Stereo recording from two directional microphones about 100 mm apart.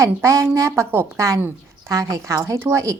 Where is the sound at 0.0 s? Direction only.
30° right (ahead or behind).